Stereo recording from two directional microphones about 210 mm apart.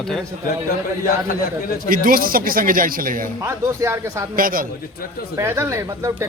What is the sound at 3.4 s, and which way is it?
Speech, 15° right (ahead or behind).